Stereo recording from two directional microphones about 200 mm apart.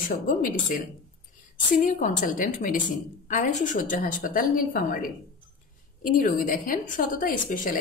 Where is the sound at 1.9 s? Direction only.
40° left (ahead or behind).